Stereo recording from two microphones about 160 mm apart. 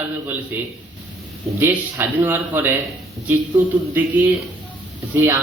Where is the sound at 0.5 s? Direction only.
10° right (ahead or behind).